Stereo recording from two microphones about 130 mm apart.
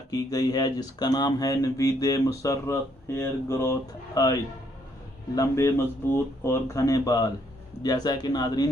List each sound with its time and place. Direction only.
0.1 s speech: 30° left (ahead or behind)